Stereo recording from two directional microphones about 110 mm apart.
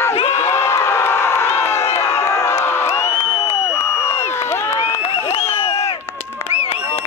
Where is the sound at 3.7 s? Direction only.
10° right (ahead or behind).